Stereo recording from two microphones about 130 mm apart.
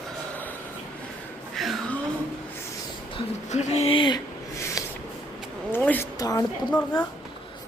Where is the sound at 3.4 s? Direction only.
60° left (ahead or behind).